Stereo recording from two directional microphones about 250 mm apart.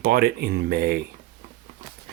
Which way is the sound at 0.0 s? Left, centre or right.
Right.